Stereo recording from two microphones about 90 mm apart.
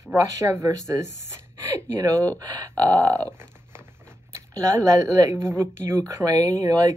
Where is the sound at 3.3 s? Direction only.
25° right (ahead or behind).